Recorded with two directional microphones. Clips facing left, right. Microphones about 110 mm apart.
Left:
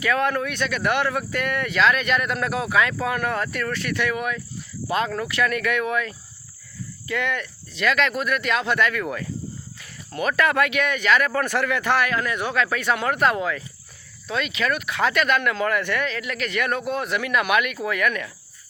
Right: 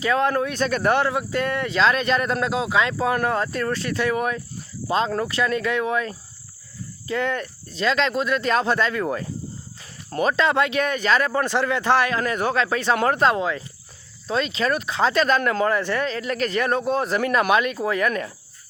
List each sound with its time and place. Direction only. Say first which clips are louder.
0.0 s a man's voice: right 2 dB; 30° right (ahead or behind)
7.9 s a man's voice: right 1 dB; 30° right (ahead or behind)